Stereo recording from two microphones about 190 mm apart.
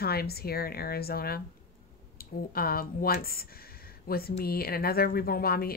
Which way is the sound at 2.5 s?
50° left (ahead or behind).